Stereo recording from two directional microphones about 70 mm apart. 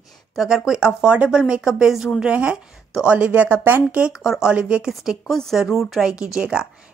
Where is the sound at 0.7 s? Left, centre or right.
Centre.